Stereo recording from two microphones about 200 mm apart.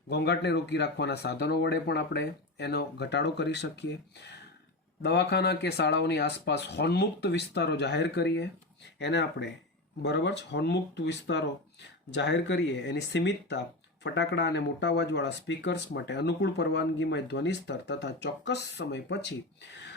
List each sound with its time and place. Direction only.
0.1 s speech: 55° left (ahead or behind)